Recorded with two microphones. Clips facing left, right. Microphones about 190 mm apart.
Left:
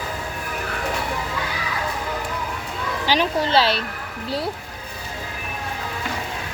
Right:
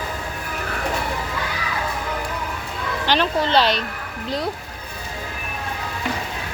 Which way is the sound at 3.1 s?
10° left (ahead or behind).